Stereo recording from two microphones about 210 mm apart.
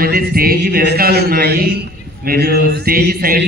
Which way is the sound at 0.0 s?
45° right (ahead or behind).